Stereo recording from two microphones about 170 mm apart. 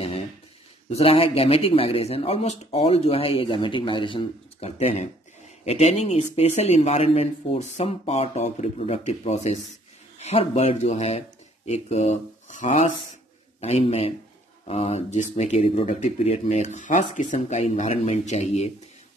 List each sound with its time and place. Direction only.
0.8 s speech: 35° left (ahead or behind)